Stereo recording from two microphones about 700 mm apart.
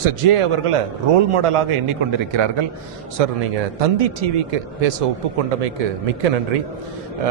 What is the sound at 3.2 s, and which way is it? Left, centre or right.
A man's voice, right.